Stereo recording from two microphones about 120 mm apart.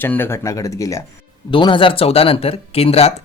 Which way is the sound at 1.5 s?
45° left (ahead or behind).